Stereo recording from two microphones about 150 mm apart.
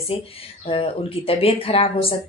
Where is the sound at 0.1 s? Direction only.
40° left (ahead or behind).